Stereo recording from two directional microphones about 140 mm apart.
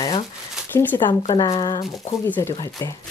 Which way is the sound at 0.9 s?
25° left (ahead or behind).